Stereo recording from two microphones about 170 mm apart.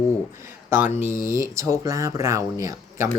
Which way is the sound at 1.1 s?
15° right (ahead or behind).